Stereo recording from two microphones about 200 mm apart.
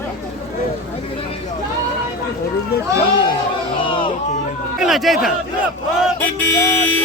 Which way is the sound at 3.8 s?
25° left (ahead or behind).